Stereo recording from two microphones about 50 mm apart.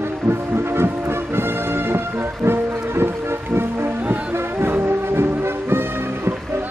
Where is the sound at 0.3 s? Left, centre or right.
Right.